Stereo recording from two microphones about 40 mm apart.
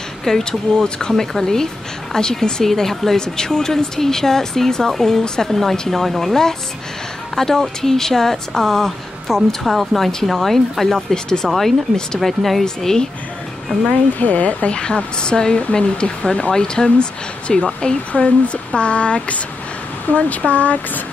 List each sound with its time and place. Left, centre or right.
0.4 s speech: centre
5.5 s speech: centre
12.6 s speech: centre
14.2 s speech: left
14.8 s speech: left